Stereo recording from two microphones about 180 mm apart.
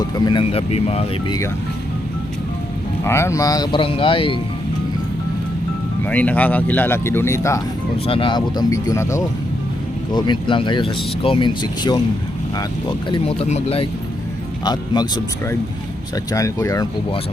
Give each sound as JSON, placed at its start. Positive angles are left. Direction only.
{"t": 0.0, "sound": "speech", "side_deg": 25}
{"t": 3.0, "sound": "speech", "side_deg": 15}
{"t": 6.1, "sound": "speech", "side_deg": 10}
{"t": 8.0, "sound": "speech", "side_deg": 30}
{"t": 13.1, "sound": "speech", "side_deg": 35}
{"t": 14.6, "sound": "speech", "side_deg": 25}